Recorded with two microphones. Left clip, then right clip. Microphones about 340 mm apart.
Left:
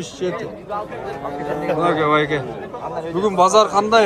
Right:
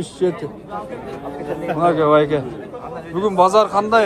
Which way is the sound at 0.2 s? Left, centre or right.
Centre.